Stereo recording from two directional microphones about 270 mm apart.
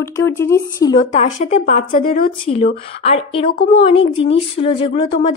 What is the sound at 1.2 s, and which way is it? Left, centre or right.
Speech, left.